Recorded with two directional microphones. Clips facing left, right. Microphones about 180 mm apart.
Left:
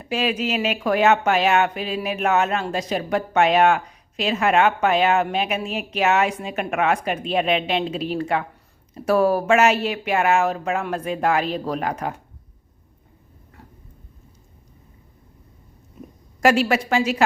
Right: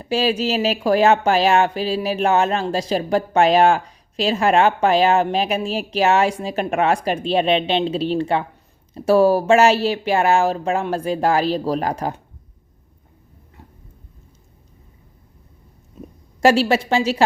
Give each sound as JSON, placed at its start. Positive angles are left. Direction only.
{"t": 0.0, "sound": "speech", "side_deg": -30}
{"t": 16.4, "sound": "a woman's voice", "side_deg": -30}